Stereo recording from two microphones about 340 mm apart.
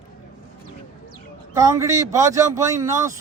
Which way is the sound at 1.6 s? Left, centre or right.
Centre.